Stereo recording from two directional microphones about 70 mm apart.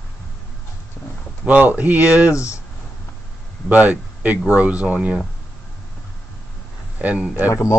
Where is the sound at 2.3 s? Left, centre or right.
Left.